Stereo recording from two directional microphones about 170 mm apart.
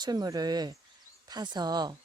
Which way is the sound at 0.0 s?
25° right (ahead or behind).